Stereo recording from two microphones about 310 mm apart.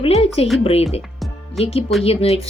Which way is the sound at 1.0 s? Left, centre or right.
Centre.